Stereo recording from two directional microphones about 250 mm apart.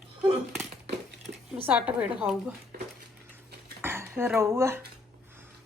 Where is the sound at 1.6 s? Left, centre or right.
Centre.